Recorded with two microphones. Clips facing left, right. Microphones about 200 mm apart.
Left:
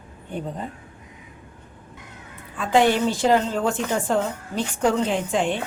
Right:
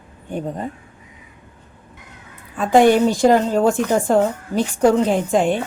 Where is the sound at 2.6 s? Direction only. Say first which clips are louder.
Right 6 dB; 45° right (ahead or behind).